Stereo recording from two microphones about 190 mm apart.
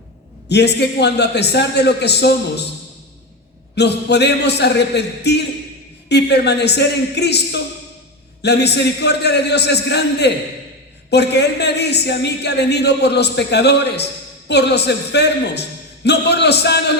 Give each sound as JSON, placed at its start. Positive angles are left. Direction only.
{"t": 0.4, "sound": "speech", "side_deg": 60}
{"t": 3.8, "sound": "speech", "side_deg": 60}